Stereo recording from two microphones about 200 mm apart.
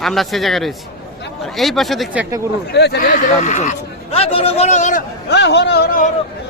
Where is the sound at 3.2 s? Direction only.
35° left (ahead or behind).